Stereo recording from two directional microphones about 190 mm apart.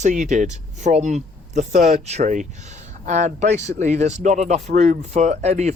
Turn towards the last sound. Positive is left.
turn(degrees=-35)  # may be behind; listen again after turning